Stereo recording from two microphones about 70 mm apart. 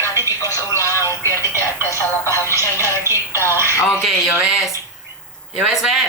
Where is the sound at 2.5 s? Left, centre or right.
Right.